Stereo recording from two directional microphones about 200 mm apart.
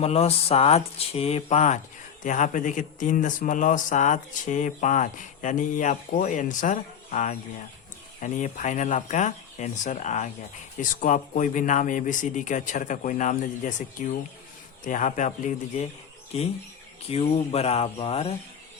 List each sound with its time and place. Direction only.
0.0 s speech: 30° left (ahead or behind)